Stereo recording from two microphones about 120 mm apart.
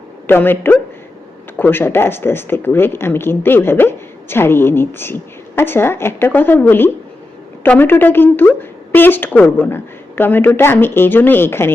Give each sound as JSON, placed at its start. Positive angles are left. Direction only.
{"t": 0.3, "sound": "a woman's voice", "side_deg": 15}